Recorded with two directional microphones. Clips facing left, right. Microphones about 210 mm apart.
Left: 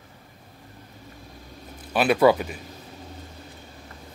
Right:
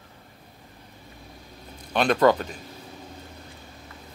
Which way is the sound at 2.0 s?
10° left (ahead or behind).